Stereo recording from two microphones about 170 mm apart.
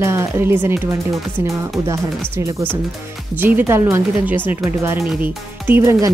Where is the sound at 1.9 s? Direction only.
15° right (ahead or behind).